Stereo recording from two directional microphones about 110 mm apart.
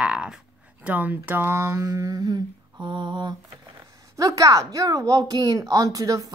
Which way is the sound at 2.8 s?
45° right (ahead or behind).